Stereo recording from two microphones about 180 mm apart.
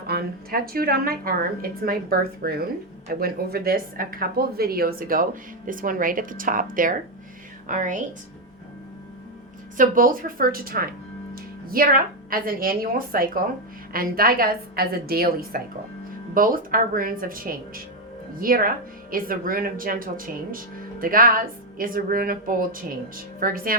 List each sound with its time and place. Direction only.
0.1 s a woman's voice: 55° right (ahead or behind)
7.7 s speech: 45° right (ahead or behind)
9.7 s a woman's voice: 50° right (ahead or behind)